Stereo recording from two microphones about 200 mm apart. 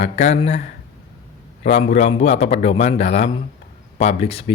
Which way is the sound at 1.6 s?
35° left (ahead or behind).